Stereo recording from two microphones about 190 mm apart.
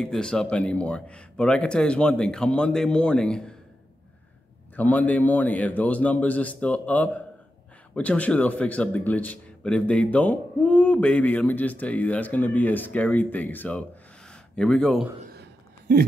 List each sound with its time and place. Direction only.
0.0 s a man's voice: 5° left (ahead or behind)
4.7 s a man's voice: 10° left (ahead or behind)
15.9 s speech: 60° right (ahead or behind)